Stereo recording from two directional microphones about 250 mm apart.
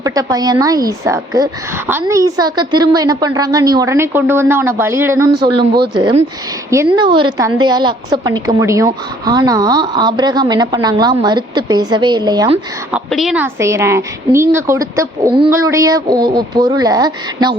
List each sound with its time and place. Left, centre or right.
0.0 s a woman's voice: centre
6.7 s a woman's voice: centre
12.9 s a woman's voice: centre